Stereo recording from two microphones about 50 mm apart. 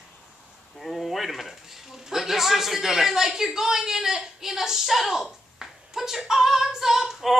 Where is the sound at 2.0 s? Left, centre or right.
Centre.